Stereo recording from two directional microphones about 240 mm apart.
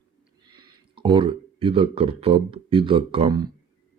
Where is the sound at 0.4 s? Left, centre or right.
Centre.